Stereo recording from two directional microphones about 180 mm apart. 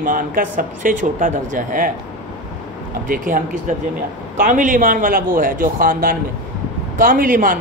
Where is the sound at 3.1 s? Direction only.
45° right (ahead or behind).